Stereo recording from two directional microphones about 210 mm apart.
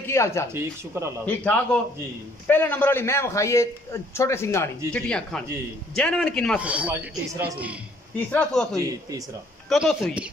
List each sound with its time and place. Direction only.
0.0 s a man's voice: 15° left (ahead or behind)
0.5 s speech: 10° right (ahead or behind)
1.2 s a man's voice: 5° left (ahead or behind)
8.3 s a man's voice: 10° left (ahead or behind)
9.7 s a man's voice: centre (ahead or behind)